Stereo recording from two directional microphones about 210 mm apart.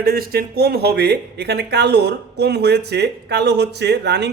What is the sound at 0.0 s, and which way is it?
Speech, 45° right (ahead or behind).